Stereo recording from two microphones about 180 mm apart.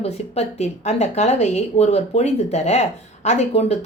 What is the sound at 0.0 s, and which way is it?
A woman's voice, 35° left (ahead or behind).